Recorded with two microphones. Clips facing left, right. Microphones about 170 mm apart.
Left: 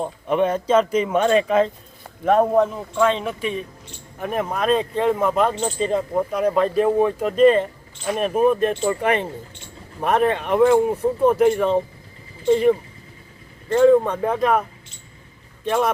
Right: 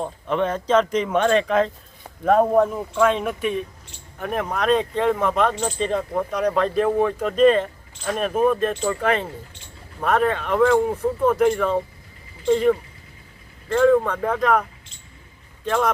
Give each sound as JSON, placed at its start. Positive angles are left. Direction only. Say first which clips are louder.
{"t": 0.0, "sound": "speech", "louder": "left 3 dB", "side_deg": 10}
{"t": 8.7, "sound": "speech", "louder": "left 2 dB", "side_deg": 20}
{"t": 15.6, "sound": "speech", "louder": "left 1 dB", "side_deg": 15}